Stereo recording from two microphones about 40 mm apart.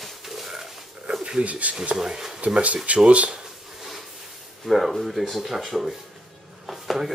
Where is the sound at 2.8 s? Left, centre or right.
Right.